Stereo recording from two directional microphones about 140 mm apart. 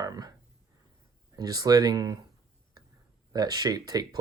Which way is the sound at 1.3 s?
25° right (ahead or behind).